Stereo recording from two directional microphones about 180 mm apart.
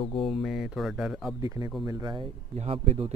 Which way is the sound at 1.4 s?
20° right (ahead or behind).